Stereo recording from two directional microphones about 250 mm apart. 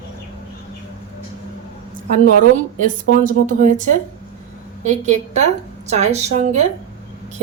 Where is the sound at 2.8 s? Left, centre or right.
Right.